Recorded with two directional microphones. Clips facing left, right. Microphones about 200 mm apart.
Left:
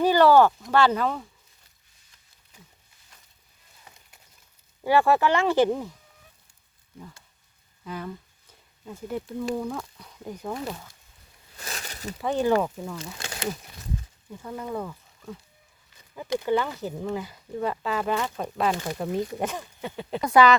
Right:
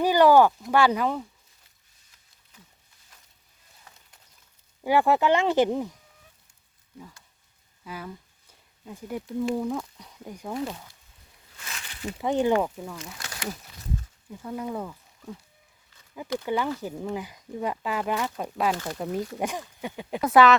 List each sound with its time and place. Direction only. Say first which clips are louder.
0.0 s speech: even; 15° right (ahead or behind)
4.8 s speech: left 1 dB; 15° right (ahead or behind)
7.9 s speech: left 3 dB; 5° right (ahead or behind)
11.5 s a sound: left 5 dB; 40° left (ahead or behind)
12.2 s speech: even; 20° right (ahead or behind)
12.6 s speech: left 1 dB; 5° right (ahead or behind)
13.0 s speech: left 3 dB; 30° left (ahead or behind)
14.4 s speech: even; 5° right (ahead or behind)
16.5 s speech: left 2 dB; 10° right (ahead or behind)
18.7 s speech: left 1 dB; 15° left (ahead or behind)
18.9 s speech: left 2 dB; centre (ahead or behind)
19.4 s speech: even; 15° right (ahead or behind)
20.2 s speech: even; centre (ahead or behind)